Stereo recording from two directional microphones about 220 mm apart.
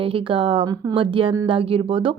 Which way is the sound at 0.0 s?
25° right (ahead or behind).